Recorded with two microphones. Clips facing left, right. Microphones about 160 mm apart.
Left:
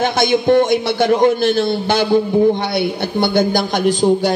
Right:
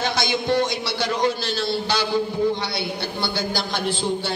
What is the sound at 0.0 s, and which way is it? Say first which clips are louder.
A man's voice: left 9 dB; 50° left (ahead or behind).